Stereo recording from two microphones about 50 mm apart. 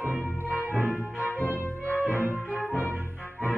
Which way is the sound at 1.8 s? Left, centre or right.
Left.